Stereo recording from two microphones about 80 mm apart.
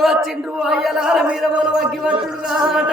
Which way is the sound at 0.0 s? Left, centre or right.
Centre.